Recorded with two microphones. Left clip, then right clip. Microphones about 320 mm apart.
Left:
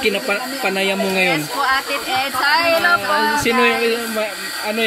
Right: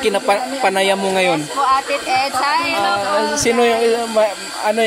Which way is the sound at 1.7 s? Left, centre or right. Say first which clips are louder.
Right 4 dB; centre.